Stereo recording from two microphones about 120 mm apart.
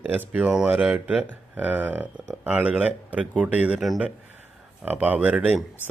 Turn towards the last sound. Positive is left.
turn(degrees=-15)  # may be behind; listen again after turning